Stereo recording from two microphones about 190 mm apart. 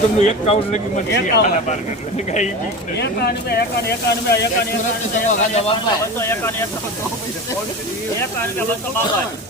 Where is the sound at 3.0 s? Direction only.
60° left (ahead or behind).